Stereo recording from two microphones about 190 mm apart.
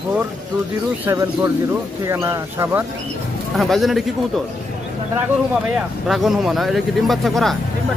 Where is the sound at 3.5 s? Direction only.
Centre (ahead or behind).